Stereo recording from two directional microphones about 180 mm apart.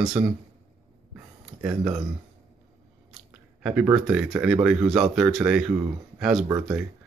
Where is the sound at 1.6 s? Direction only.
5° right (ahead or behind).